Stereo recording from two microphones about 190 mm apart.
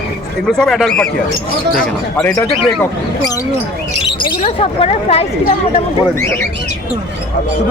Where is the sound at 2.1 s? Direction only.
10° left (ahead or behind).